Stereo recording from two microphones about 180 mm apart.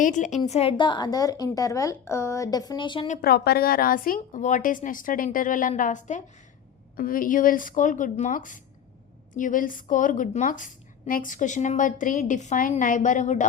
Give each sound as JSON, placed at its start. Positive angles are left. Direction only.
{"t": 0.0, "sound": "a woman's voice", "side_deg": 45}
{"t": 3.1, "sound": "a woman's voice", "side_deg": 55}